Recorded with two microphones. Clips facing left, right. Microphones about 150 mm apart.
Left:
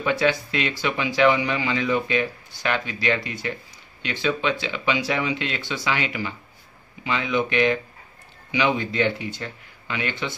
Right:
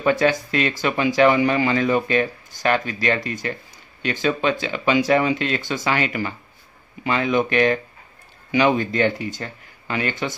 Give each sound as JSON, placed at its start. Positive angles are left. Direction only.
{"t": 0.0, "sound": "speech", "side_deg": -45}